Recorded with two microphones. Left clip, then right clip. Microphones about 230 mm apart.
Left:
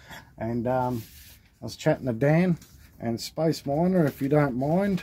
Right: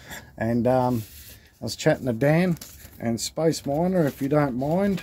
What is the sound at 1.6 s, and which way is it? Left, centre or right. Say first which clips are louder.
Speech: right 3 dB; centre.